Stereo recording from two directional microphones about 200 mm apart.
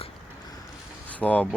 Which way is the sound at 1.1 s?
5° left (ahead or behind).